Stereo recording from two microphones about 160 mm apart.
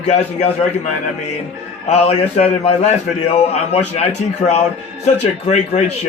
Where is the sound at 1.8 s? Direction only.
40° left (ahead or behind).